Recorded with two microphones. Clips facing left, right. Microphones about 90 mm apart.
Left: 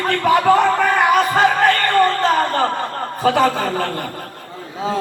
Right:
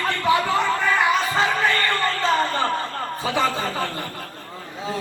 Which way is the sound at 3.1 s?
55° left (ahead or behind).